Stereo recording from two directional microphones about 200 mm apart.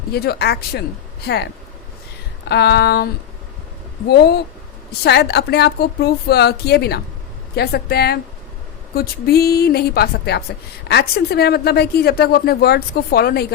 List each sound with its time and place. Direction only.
0.1 s a woman's voice: 55° left (ahead or behind)
4.1 s a woman's voice: 55° left (ahead or behind)